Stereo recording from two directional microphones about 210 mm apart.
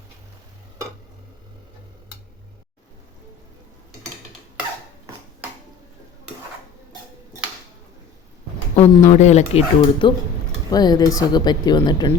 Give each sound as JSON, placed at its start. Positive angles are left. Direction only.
{"t": 8.7, "sound": "speech", "side_deg": 30}
{"t": 10.7, "sound": "speech", "side_deg": 20}